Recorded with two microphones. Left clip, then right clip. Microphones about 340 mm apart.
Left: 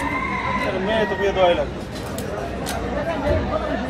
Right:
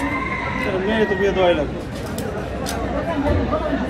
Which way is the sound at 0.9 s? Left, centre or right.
Left.